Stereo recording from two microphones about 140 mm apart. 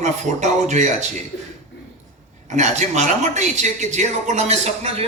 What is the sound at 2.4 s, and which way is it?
A man's voice, 55° right (ahead or behind).